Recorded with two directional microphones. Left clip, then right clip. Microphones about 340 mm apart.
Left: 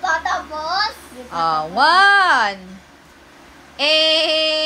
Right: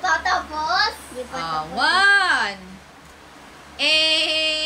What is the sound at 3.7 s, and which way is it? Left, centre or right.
Speech, centre.